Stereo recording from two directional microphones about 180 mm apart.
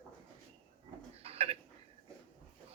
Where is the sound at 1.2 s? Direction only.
35° right (ahead or behind).